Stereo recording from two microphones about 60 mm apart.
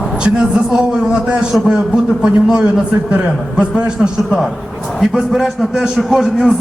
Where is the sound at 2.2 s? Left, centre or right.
Centre.